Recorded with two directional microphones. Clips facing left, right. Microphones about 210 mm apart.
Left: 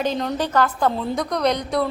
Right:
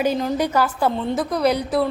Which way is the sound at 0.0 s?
5° right (ahead or behind).